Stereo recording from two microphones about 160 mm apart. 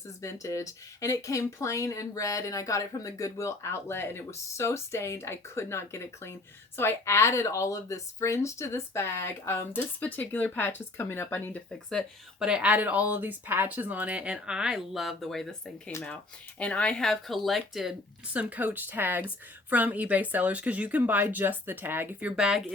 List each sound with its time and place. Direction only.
0.2 s a woman's voice: 20° left (ahead or behind)
12.5 s speech: 5° right (ahead or behind)
15.9 s a woman's voice: 15° left (ahead or behind); by 22.7 s 5° right (ahead or behind)